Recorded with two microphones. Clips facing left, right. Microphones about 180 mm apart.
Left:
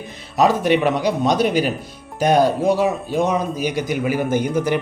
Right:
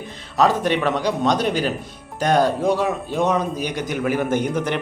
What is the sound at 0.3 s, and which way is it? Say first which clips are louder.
A man's voice: left 2 dB; 10° left (ahead or behind).